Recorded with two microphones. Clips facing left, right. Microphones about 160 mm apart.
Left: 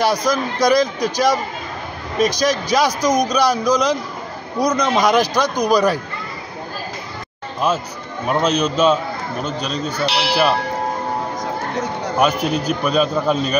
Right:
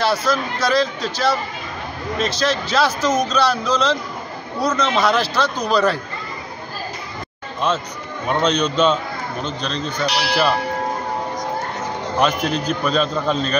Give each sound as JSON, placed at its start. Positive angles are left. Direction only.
{"t": 0.0, "sound": "a man's voice", "side_deg": 15}
{"t": 7.6, "sound": "a man's voice", "side_deg": 10}
{"t": 12.2, "sound": "a man's voice", "side_deg": 10}